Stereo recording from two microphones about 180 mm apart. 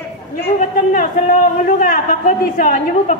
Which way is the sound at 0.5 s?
45° left (ahead or behind).